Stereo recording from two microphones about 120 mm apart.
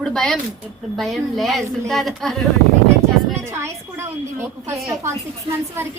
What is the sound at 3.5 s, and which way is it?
A woman's voice, 20° right (ahead or behind).